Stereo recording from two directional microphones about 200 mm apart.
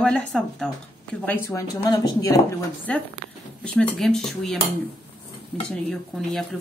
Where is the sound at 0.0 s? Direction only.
5° left (ahead or behind).